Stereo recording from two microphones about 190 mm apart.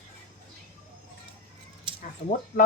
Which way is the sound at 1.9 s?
25° right (ahead or behind).